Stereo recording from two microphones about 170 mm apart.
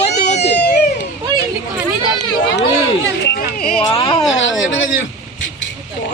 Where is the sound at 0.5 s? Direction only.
80° left.